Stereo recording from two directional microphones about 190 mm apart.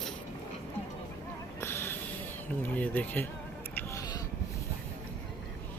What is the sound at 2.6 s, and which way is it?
Speech, 10° left (ahead or behind).